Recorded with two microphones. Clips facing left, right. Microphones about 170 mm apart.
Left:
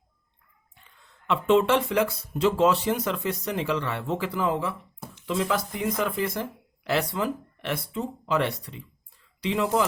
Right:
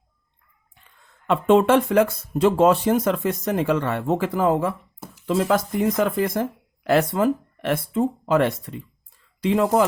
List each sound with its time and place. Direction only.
1.0 s speech: 50° right (ahead or behind)